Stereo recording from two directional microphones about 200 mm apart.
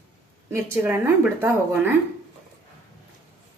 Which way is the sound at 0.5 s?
10° right (ahead or behind).